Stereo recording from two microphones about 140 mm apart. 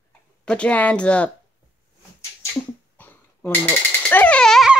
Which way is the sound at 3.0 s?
15° left (ahead or behind).